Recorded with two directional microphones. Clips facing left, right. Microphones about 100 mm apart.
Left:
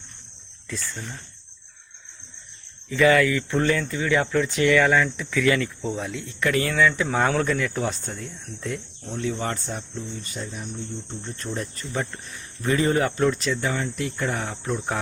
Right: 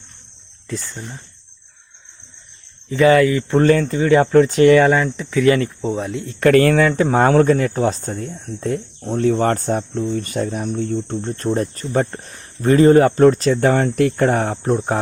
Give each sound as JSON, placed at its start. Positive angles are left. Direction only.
{"t": 0.7, "sound": "speech", "side_deg": -20}
{"t": 2.9, "sound": "speech", "side_deg": -30}
{"t": 3.6, "sound": "speech", "side_deg": -40}
{"t": 6.4, "sound": "speech", "side_deg": -55}
{"t": 11.2, "sound": "speech", "side_deg": -45}